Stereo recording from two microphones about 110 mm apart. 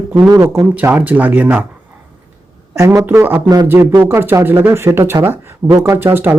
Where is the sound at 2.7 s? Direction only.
25° right (ahead or behind).